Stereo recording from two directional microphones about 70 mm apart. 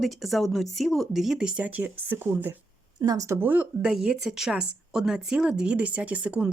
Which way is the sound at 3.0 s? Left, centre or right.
Right.